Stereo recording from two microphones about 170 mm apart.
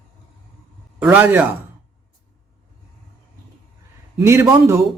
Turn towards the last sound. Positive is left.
turn(degrees=-15)  # may be behind; listen again after turning